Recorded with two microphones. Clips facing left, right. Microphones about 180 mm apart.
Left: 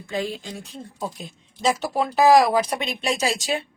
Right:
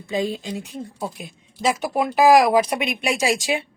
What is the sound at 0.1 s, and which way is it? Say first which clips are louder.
Speech: right 4 dB; 20° right (ahead or behind).